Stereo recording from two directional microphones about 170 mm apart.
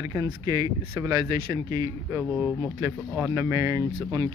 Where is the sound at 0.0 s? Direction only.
20° right (ahead or behind).